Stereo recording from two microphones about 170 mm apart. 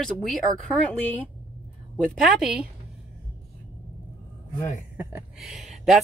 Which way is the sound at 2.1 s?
Centre (ahead or behind).